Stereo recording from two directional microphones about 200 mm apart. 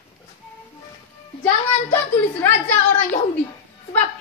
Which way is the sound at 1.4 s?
10° left (ahead or behind).